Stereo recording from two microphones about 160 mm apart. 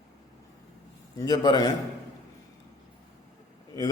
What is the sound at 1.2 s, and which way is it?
Speech, 25° left (ahead or behind).